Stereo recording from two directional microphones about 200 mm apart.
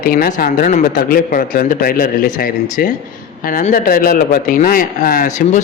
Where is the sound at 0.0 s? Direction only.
45° left (ahead or behind).